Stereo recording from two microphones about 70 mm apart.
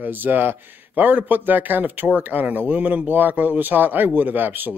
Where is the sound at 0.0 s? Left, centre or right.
Right.